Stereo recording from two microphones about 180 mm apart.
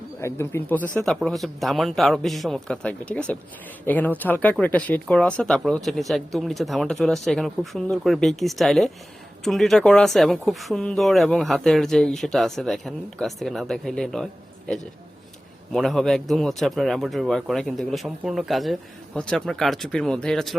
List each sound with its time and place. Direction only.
0.2 s speech: 15° left (ahead or behind)
1.0 s speech: centre (ahead or behind)
15.7 s speech: centre (ahead or behind)